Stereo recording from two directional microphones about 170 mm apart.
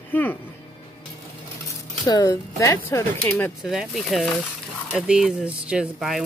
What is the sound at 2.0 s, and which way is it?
Speech, 20° left (ahead or behind).